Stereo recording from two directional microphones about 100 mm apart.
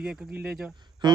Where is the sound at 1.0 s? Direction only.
45° right (ahead or behind).